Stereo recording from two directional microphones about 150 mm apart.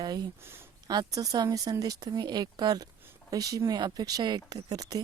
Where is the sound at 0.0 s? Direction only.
25° right (ahead or behind).